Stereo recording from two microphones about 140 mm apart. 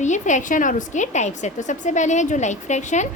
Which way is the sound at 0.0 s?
60° left (ahead or behind).